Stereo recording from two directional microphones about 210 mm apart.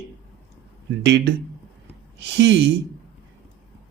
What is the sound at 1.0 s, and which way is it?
Speech, 55° right (ahead or behind).